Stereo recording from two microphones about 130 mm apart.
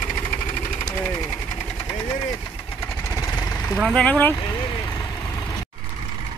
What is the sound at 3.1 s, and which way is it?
Vehicle, 20° left (ahead or behind).